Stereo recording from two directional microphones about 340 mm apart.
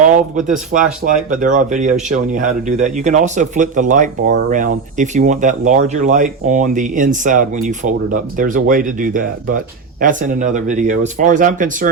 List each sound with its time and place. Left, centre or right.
0.1 s speech: right